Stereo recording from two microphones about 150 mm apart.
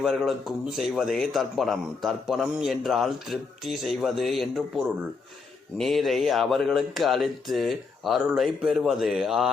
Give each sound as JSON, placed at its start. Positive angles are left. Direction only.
{"t": 0.0, "sound": "a man's voice", "side_deg": 0}
{"t": 5.7, "sound": "a man's voice", "side_deg": 0}